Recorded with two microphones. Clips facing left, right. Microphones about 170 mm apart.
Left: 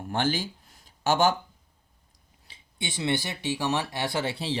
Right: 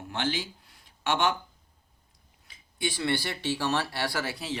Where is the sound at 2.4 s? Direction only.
25° left (ahead or behind).